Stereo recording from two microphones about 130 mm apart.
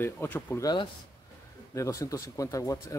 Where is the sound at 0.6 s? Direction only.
30° left (ahead or behind).